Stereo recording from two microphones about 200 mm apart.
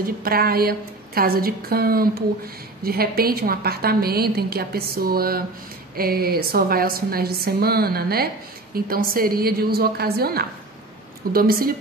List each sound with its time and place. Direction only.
0.0 s a woman's voice: 50° right (ahead or behind)